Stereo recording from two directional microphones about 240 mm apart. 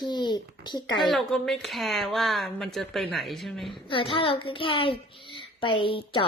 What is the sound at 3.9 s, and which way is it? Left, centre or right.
A woman's voice, left.